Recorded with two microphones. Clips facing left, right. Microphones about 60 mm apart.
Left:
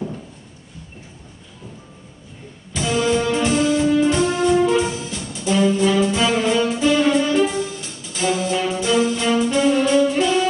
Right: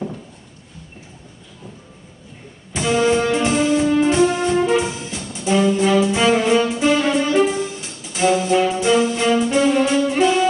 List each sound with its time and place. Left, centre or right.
2.7 s music: right
4.7 s brass instrument: right
6.1 s music: right